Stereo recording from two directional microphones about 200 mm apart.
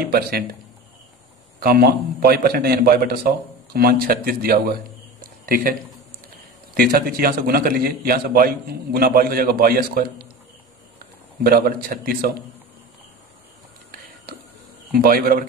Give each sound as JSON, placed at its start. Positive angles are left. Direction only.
{"t": 0.1, "sound": "a man's voice", "side_deg": -50}
{"t": 1.6, "sound": "a man's voice", "side_deg": -50}
{"t": 14.9, "sound": "a man's voice", "side_deg": -50}